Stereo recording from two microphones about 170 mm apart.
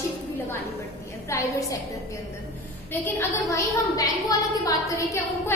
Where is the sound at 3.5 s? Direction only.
20° left (ahead or behind).